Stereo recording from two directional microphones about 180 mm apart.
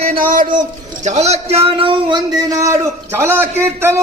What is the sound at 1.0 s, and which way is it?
A man's voice, 40° right (ahead or behind).